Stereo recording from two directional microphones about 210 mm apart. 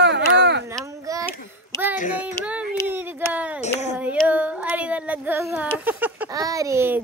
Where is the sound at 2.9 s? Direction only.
10° right (ahead or behind).